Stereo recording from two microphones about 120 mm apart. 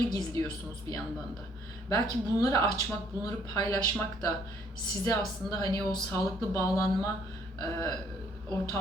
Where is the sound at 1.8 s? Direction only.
30° left (ahead or behind).